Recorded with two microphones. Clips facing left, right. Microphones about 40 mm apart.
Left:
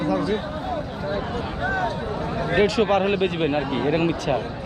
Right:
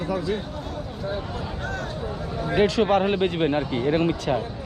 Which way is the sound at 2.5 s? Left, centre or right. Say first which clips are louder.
Even; left.